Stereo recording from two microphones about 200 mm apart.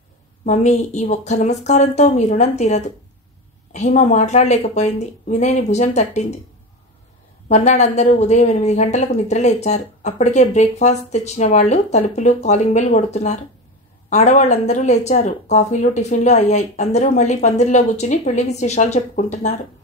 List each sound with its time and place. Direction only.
0.5 s speech: 35° left (ahead or behind)
7.4 s speech: 35° left (ahead or behind)